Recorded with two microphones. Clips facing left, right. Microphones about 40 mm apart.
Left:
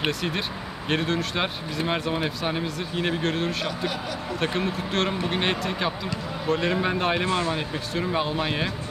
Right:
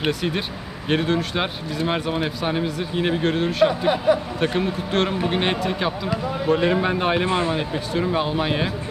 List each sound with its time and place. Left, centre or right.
0.0 s speech: centre
3.6 s speech: right
4.4 s speech: centre
7.2 s speech: right
7.5 s speech: centre